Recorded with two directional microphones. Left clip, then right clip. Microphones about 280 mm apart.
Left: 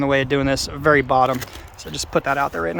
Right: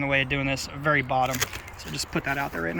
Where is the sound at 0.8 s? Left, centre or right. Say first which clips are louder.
Left 8 dB; centre.